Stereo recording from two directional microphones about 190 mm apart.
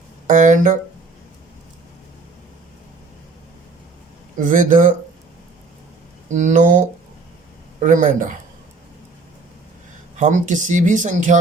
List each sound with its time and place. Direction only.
0.3 s speech: 40° right (ahead or behind)
4.4 s speech: 45° right (ahead or behind)
6.3 s speech: 40° right (ahead or behind)
10.2 s speech: 40° right (ahead or behind)